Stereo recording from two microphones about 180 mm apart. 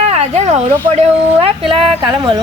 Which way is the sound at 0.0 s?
40° right (ahead or behind).